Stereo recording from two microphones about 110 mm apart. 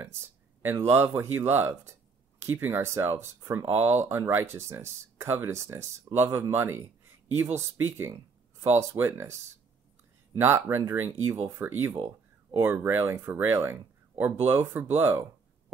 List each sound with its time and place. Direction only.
0.6 s a man's voice: 20° right (ahead or behind)